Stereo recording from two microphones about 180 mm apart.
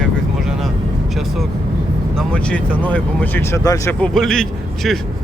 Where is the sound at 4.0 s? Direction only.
Centre (ahead or behind).